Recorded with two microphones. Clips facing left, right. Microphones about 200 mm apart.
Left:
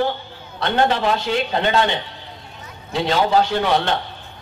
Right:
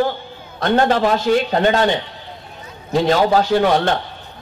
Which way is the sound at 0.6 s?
45° right (ahead or behind).